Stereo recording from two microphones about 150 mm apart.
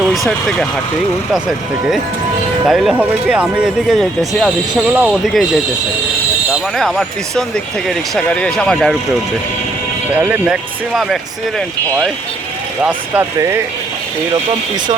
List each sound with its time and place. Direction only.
0.0 s speech: centre (ahead or behind)
6.5 s speech: centre (ahead or behind)
10.2 s speech: 10° right (ahead or behind)
12.8 s speech: 10° right (ahead or behind)